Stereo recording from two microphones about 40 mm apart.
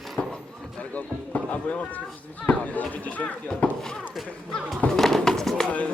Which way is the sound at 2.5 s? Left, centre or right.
Left.